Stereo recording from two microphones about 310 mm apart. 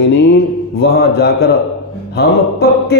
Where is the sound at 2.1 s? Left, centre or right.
Left.